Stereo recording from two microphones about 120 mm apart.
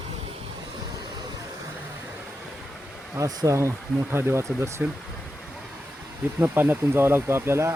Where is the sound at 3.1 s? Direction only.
25° right (ahead or behind).